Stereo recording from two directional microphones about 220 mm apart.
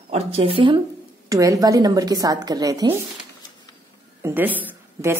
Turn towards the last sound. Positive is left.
turn(degrees=-10)  # may be behind; listen again after turning